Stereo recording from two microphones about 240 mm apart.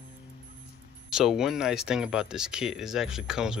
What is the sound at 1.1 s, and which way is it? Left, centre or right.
Speech, centre.